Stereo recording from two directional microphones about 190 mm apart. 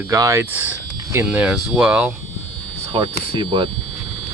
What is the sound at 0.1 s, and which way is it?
Speech, 15° right (ahead or behind).